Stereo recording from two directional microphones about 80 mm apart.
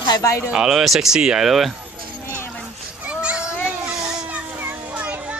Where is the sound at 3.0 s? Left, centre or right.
Centre.